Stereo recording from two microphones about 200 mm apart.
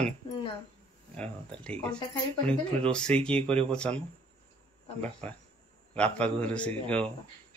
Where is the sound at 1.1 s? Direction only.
5° left (ahead or behind).